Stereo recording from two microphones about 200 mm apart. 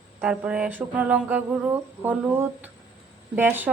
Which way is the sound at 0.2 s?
5° right (ahead or behind).